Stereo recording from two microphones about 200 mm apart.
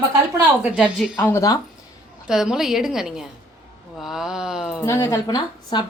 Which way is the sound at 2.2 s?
5° right (ahead or behind).